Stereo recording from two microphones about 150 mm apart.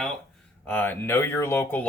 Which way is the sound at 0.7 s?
15° left (ahead or behind).